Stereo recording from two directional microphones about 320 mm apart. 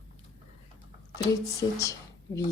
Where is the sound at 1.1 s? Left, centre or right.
Centre.